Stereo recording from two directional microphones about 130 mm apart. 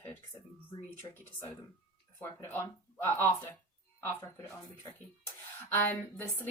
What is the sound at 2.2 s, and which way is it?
Speech, 15° left (ahead or behind).